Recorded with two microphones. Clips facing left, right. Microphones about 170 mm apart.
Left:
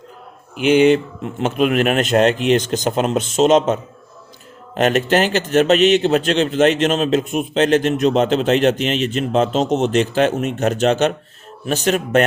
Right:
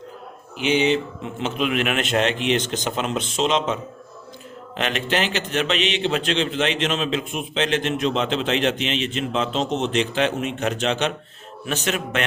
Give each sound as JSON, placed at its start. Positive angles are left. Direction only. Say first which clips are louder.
{"t": 0.5, "sound": "speech", "louder": "left 7 dB", "side_deg": 50}
{"t": 4.8, "sound": "speech", "louder": "left 8 dB", "side_deg": 45}